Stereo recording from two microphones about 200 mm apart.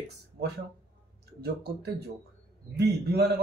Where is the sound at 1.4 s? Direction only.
55° right (ahead or behind).